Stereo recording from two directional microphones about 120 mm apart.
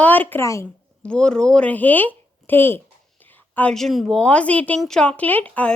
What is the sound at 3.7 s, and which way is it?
Speech, centre (ahead or behind).